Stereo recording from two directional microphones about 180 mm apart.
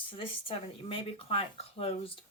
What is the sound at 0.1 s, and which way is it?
Speech, 30° left (ahead or behind).